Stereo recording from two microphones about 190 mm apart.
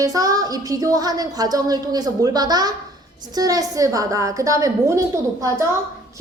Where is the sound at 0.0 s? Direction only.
20° right (ahead or behind).